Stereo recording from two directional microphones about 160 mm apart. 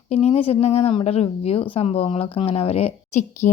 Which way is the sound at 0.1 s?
40° left (ahead or behind).